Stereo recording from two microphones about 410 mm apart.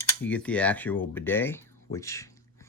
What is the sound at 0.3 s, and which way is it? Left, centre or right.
Speech, centre.